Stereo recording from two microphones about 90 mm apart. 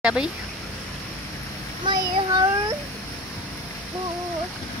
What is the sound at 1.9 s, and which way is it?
Speech, 60° right (ahead or behind).